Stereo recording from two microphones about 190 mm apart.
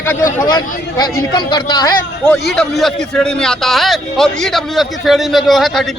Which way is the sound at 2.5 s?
Centre (ahead or behind).